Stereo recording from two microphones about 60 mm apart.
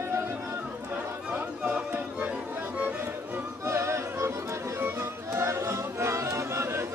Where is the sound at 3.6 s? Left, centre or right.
Right.